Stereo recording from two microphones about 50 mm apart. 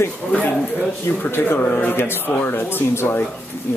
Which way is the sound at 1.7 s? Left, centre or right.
Left.